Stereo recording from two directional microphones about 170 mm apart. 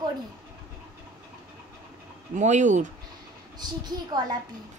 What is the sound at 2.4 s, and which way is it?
Speech, 45° right (ahead or behind).